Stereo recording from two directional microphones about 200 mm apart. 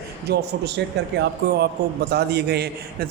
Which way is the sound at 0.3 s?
55° right (ahead or behind).